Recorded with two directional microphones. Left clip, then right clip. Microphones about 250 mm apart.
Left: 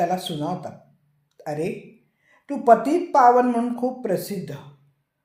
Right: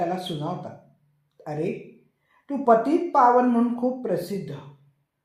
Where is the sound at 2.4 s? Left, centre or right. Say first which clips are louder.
Left 3 dB; left.